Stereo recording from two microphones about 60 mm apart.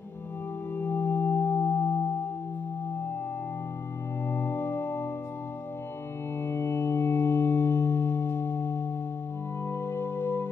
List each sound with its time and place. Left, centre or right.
0.7 s singing bowl: left
4.3 s organ: left
6.4 s music: left